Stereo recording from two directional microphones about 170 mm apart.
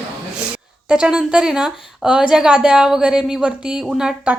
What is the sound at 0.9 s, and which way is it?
A woman's voice, 5° right (ahead or behind).